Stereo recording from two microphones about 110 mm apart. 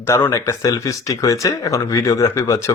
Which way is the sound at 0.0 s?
25° left (ahead or behind).